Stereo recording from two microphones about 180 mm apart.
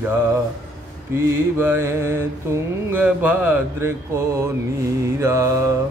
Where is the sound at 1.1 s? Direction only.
15° right (ahead or behind).